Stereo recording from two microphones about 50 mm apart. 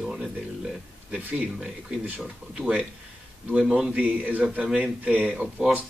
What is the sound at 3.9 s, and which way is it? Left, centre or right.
A man's voice, right.